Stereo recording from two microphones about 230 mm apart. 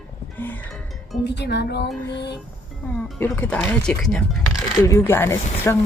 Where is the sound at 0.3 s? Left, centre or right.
Centre.